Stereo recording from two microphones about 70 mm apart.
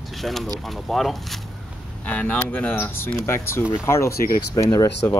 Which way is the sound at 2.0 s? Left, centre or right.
Centre.